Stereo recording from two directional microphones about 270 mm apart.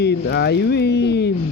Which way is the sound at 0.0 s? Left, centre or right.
Left.